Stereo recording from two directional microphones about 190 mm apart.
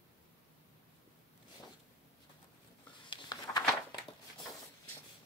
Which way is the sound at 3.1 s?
20° left (ahead or behind).